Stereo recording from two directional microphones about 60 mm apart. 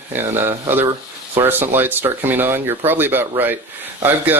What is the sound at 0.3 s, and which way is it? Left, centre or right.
Speech, right.